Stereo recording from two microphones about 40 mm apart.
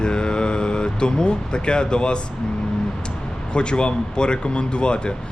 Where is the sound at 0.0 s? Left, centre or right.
Left.